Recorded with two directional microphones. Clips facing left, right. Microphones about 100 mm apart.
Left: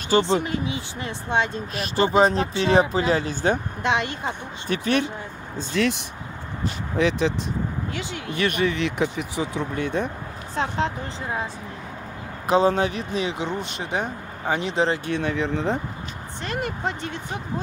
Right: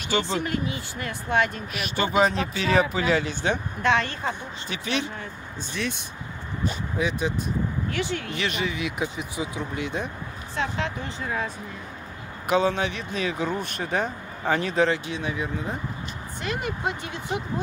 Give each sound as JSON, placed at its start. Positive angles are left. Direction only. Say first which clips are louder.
{"t": 0.2, "sound": "speech", "louder": "left 4 dB", "side_deg": 20}
{"t": 3.8, "sound": "speech", "louder": "right 2 dB", "side_deg": 20}
{"t": 4.6, "sound": "speech", "louder": "left 6 dB", "side_deg": 50}
{"t": 7.0, "sound": "speech", "louder": "left 6 dB", "side_deg": 90}
{"t": 7.9, "sound": "speech", "louder": "right 4 dB", "side_deg": 20}
{"t": 8.4, "sound": "speech", "louder": "left 8 dB", "side_deg": 55}
{"t": 10.5, "sound": "speech", "louder": "left 4 dB", "side_deg": 40}
{"t": 12.4, "sound": "speech", "louder": "left 3 dB", "side_deg": 35}
{"t": 15.0, "sound": "speech", "louder": "left 5 dB", "side_deg": 65}
{"t": 16.4, "sound": "speech", "louder": "left 1 dB", "side_deg": -5}